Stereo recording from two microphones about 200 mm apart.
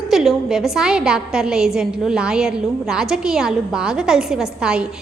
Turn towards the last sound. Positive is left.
turn(degrees=-5)  # may be behind; listen again after turning